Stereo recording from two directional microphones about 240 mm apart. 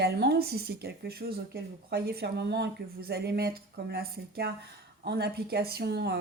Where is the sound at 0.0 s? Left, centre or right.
Right.